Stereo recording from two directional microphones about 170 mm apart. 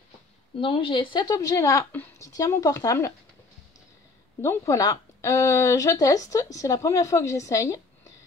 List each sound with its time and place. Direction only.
0.6 s speech: 30° left (ahead or behind)
4.4 s speech: 15° left (ahead or behind)